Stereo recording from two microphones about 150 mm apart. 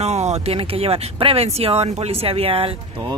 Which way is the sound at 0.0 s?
45° right (ahead or behind).